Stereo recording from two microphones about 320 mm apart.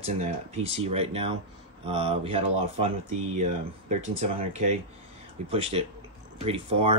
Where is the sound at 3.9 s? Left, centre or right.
Centre.